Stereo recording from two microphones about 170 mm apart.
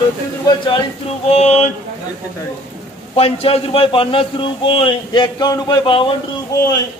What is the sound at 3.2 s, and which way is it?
A man's voice, 35° left (ahead or behind).